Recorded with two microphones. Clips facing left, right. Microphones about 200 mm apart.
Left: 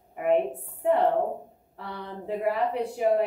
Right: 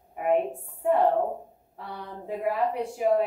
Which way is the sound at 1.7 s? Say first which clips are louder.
Left 1 dB; 65° left (ahead or behind).